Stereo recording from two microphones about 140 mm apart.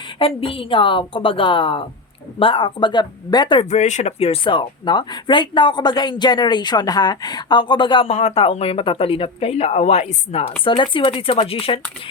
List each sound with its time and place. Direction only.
0.2 s speech: 40° left (ahead or behind)
3.6 s speech: 55° left (ahead or behind)
10.6 s speech: 35° left (ahead or behind)